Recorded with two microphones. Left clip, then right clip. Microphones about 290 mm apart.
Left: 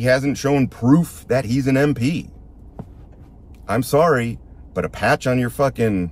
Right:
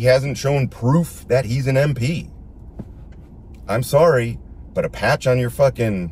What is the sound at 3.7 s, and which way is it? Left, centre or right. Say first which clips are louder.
Speech: right 1 dB; centre.